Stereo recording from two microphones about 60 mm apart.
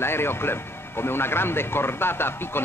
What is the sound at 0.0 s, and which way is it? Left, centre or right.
Speech, left.